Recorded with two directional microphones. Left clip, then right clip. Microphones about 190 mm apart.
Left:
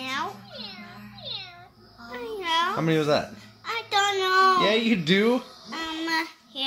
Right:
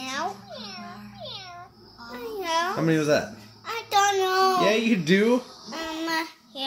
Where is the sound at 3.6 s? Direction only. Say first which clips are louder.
Right 2 dB; 35° right (ahead or behind).